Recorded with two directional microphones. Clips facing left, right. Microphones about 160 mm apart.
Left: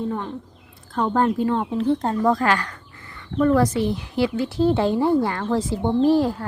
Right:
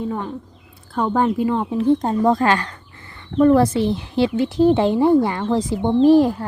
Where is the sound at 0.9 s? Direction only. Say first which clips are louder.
Right 2 dB; 5° right (ahead or behind).